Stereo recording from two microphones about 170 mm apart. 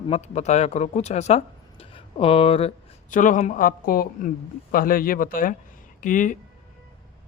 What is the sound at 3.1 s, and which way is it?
Speech, 50° left (ahead or behind).